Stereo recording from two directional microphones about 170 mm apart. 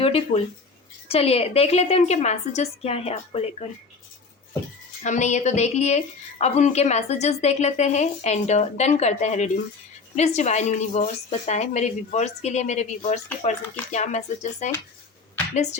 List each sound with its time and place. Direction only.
0.0 s speech: 35° left (ahead or behind)
5.0 s speech: 45° left (ahead or behind)